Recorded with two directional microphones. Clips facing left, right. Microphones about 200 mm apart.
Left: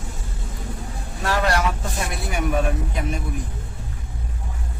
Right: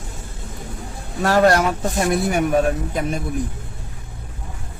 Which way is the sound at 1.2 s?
45° right (ahead or behind).